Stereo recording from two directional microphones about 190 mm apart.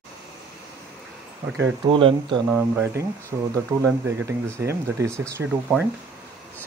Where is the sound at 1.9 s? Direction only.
25° right (ahead or behind).